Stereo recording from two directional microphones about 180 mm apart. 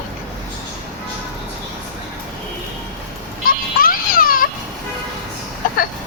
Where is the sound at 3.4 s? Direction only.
50° left (ahead or behind).